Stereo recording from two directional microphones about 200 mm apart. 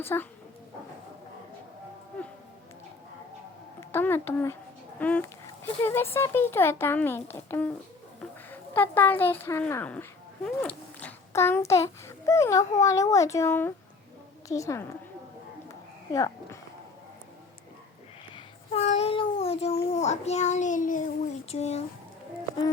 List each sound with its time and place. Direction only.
0.0 s a child's voice: 10° left (ahead or behind)
3.8 s a child's voice: 10° left (ahead or behind)
16.1 s a child's voice: 15° left (ahead or behind)
18.3 s a child's voice: 30° left (ahead or behind)